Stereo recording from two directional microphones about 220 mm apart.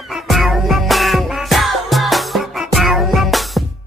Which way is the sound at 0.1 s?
Centre (ahead or behind).